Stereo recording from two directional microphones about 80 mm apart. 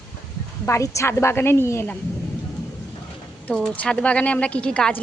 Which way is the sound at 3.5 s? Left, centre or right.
Centre.